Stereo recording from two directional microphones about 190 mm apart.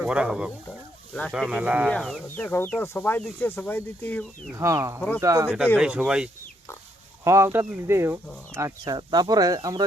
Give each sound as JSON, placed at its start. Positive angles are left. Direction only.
{"t": 0.0, "sound": "speech", "side_deg": -5}
{"t": 4.5, "sound": "speech", "side_deg": -15}
{"t": 4.9, "sound": "speech", "side_deg": 10}
{"t": 5.2, "sound": "speech", "side_deg": -15}
{"t": 5.7, "sound": "speech", "side_deg": -5}